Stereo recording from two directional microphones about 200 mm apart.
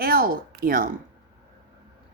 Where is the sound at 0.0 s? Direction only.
45° right (ahead or behind).